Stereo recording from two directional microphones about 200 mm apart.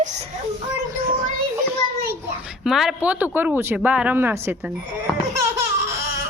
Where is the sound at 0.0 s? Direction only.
35° right (ahead or behind).